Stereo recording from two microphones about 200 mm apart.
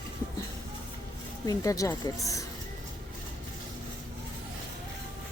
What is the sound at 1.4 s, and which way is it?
Speech, 20° left (ahead or behind).